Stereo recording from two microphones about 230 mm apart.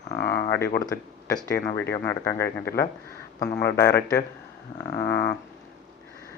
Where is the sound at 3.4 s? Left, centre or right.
Left.